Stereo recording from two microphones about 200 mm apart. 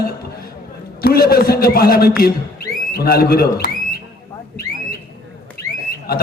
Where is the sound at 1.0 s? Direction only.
50° left (ahead or behind).